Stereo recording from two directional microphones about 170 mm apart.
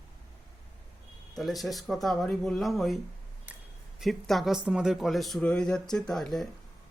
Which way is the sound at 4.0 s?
Centre (ahead or behind).